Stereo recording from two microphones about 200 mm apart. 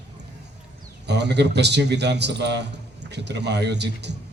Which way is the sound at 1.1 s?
60° right (ahead or behind).